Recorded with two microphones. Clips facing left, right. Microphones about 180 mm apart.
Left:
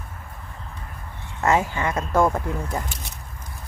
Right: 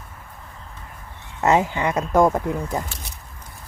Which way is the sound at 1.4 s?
20° right (ahead or behind).